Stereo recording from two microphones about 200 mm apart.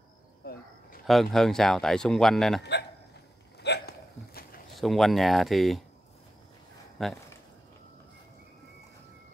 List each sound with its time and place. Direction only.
0.4 s speech: 50° left (ahead or behind)
1.0 s speech: centre (ahead or behind)
3.6 s hiccup: 55° left (ahead or behind)
4.7 s speech: centre (ahead or behind)
7.0 s speech: centre (ahead or behind)